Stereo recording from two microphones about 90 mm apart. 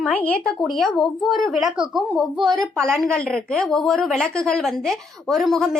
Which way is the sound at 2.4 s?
50° right (ahead or behind).